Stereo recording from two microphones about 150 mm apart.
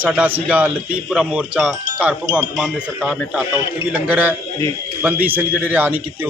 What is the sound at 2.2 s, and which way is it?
Speech, 20° right (ahead or behind).